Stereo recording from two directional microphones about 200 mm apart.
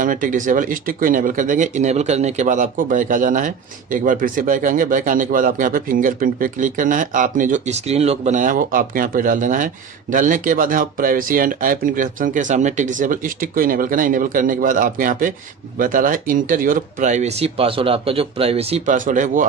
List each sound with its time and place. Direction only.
0.0 s a man's voice: 40° right (ahead or behind)